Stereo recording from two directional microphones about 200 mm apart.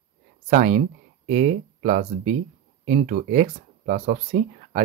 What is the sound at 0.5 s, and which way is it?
Speech, 40° right (ahead or behind).